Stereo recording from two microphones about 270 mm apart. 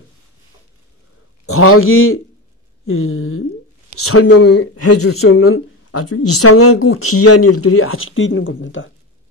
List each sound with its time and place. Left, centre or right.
1.4 s speech: left